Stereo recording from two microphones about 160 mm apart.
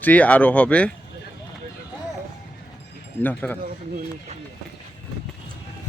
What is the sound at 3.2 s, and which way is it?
Speech, 10° left (ahead or behind).